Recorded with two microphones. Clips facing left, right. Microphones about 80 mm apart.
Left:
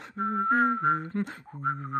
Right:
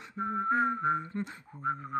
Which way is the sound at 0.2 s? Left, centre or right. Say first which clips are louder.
Left 4 dB; left.